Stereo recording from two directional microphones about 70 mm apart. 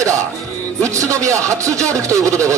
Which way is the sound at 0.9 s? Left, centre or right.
Right.